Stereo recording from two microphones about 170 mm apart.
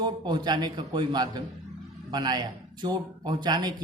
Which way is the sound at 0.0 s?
25° right (ahead or behind).